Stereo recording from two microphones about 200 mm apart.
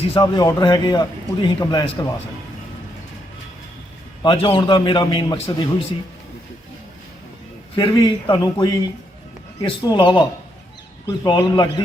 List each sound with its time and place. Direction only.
0.0 s a man's voice: 25° left (ahead or behind)
4.2 s a man's voice: 25° left (ahead or behind)
7.8 s a man's voice: 20° left (ahead or behind)